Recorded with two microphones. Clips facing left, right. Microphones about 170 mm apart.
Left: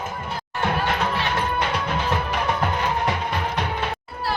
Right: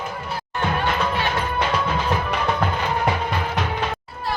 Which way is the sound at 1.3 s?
60° left (ahead or behind).